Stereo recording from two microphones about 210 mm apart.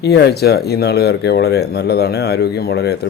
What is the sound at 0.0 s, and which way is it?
Speech, 50° left (ahead or behind).